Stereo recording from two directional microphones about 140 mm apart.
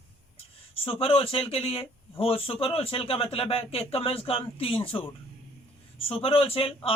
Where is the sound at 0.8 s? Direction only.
40° left (ahead or behind).